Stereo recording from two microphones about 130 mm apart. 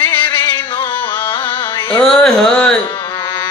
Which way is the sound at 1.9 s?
5° left (ahead or behind).